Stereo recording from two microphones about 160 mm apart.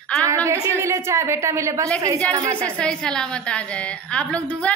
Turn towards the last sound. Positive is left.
turn(degrees=10)  # may be behind; listen again after turning